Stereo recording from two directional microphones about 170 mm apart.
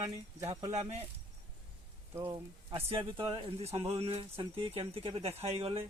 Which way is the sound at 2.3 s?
30° right (ahead or behind).